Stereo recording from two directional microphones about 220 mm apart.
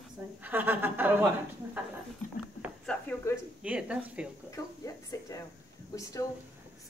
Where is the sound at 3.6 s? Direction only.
5° right (ahead or behind).